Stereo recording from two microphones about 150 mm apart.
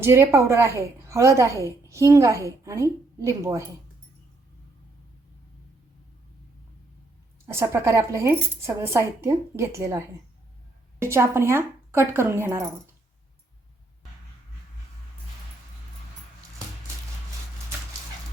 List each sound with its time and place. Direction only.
0.0 s a woman's voice: 15° right (ahead or behind)
7.4 s speech: 20° right (ahead or behind)
11.0 s speech: 15° right (ahead or behind)